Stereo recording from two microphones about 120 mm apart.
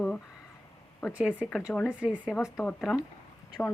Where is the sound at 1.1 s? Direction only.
10° right (ahead or behind).